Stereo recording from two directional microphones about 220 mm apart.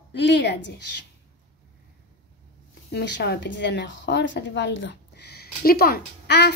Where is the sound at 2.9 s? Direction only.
50° left (ahead or behind).